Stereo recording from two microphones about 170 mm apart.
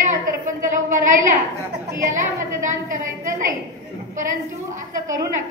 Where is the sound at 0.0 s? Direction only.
50° right (ahead or behind).